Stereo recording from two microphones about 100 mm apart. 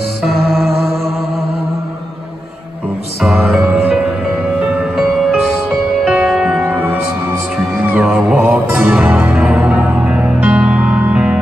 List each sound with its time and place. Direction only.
0.2 s music: centre (ahead or behind)
3.2 s music: 5° right (ahead or behind)